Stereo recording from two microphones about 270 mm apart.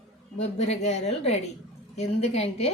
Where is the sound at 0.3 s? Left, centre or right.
Left.